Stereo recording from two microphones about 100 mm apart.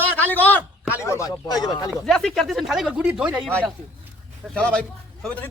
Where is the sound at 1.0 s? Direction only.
30° left (ahead or behind).